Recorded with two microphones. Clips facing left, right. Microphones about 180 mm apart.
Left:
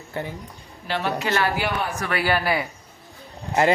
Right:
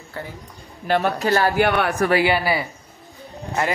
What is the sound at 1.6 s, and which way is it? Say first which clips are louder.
Speech: right 7 dB; 65° right (ahead or behind).